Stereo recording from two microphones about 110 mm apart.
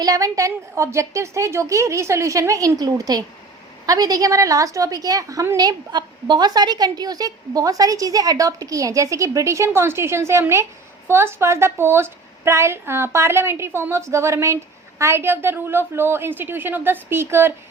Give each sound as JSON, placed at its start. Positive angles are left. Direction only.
{"t": 0.0, "sound": "a woman's voice", "side_deg": -30}